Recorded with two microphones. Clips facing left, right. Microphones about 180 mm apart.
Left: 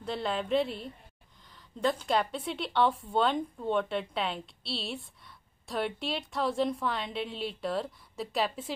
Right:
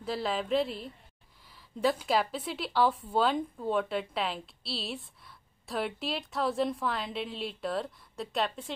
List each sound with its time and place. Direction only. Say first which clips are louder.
0.0 s speech: even; centre (ahead or behind)